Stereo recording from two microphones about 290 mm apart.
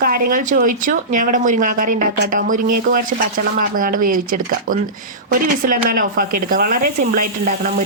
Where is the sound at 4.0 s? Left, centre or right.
Right.